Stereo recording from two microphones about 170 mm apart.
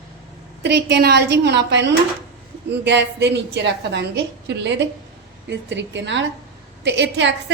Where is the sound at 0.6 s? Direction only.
85° right.